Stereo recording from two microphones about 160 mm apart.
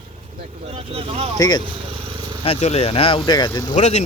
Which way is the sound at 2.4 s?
40° left (ahead or behind).